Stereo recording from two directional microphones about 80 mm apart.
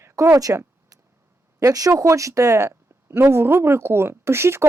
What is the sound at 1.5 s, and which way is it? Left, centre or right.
Speech, right.